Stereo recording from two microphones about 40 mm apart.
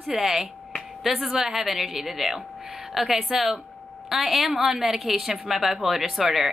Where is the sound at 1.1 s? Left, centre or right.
Centre.